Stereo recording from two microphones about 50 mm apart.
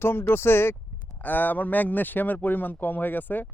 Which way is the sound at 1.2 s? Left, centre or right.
Left.